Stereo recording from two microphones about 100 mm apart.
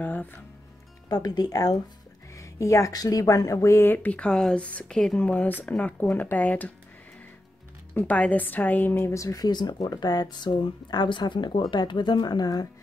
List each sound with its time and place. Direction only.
0.0 s music: 15° left (ahead or behind)
1.0 s speech: 40° left (ahead or behind); by 6.7 s 15° left (ahead or behind)
7.9 s a woman's voice: 15° left (ahead or behind); by 12.6 s 40° left (ahead or behind)